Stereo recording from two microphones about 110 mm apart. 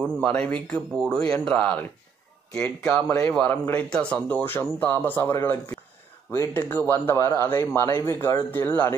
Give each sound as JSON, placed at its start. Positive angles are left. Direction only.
{"t": 0.2, "sound": "a man's voice", "side_deg": 10}